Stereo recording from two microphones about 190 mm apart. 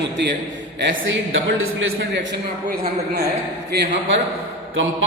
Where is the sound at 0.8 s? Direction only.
85° right.